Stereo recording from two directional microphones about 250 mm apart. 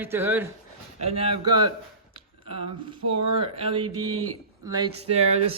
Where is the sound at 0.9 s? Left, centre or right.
Right.